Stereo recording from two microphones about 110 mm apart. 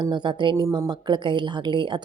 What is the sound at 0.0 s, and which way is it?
A woman's voice, 45° right (ahead or behind).